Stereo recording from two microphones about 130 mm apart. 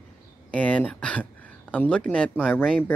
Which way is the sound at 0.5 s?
10° left (ahead or behind).